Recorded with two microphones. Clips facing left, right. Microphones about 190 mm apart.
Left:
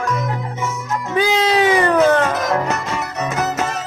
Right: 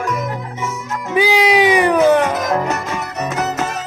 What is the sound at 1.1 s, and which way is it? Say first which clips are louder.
Cat: right 3 dB; 10° right (ahead or behind).